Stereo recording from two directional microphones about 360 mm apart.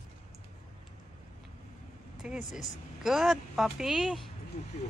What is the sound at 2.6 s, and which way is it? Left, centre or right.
A woman's voice, centre.